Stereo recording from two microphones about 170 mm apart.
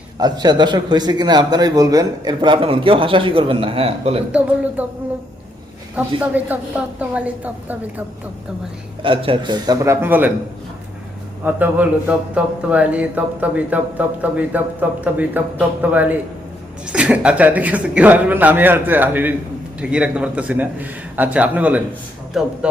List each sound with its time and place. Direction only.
0.2 s speech: 25° right (ahead or behind)
4.3 s a man's voice: 10° right (ahead or behind)
6.0 s a man's voice: 10° right (ahead or behind)
9.0 s speech: 30° right (ahead or behind); by 10.3 s 10° right (ahead or behind)
11.4 s a man's voice: 10° right (ahead or behind)